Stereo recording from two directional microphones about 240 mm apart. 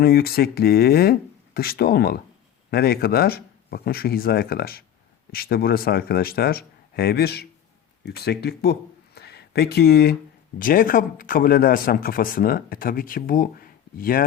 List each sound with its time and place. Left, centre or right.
0.0 s speech: left